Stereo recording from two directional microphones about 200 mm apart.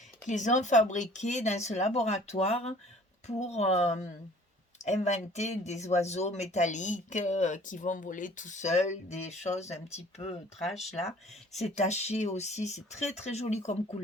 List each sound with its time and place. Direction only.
0.3 s speech: 40° left (ahead or behind)
10.6 s speech: centre (ahead or behind)
11.7 s speech: 35° left (ahead or behind)